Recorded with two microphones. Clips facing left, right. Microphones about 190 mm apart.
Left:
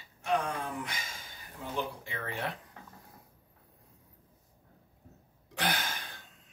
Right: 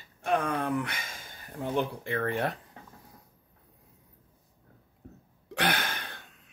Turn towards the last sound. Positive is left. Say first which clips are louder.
# right 4 dB
turn(degrees=-65)  # may be behind; listen again after turning